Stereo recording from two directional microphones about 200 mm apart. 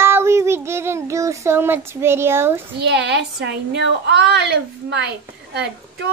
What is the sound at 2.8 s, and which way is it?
A woman's voice, 60° right (ahead or behind).